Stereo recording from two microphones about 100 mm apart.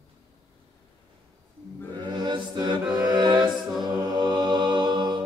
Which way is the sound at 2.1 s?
45° right (ahead or behind).